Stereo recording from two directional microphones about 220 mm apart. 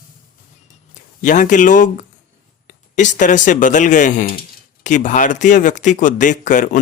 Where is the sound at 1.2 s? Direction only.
35° left (ahead or behind).